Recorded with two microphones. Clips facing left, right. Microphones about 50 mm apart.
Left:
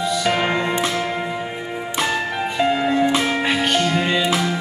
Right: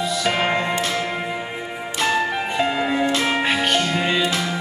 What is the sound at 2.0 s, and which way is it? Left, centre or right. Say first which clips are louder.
Music: right 4 dB; centre.